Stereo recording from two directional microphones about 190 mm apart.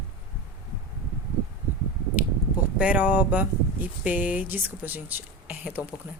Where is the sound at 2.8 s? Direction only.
5° right (ahead or behind).